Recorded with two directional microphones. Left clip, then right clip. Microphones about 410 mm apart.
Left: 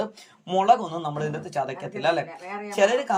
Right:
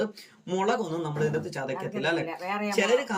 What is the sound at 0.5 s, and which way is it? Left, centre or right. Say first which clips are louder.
Speech: left 7 dB; centre.